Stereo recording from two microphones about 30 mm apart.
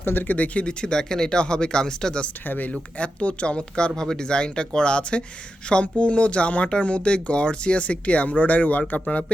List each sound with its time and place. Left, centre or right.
0.2 s speech: left
0.6 s speech: left
0.9 s speech: left
2.5 s speech: left
3.0 s speech: left
3.4 s speech: left